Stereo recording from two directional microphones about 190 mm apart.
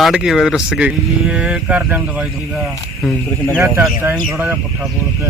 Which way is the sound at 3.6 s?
10° right (ahead or behind).